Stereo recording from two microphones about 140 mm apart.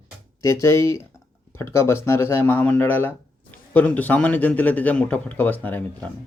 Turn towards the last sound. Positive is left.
turn(degrees=10)  # may be behind; listen again after turning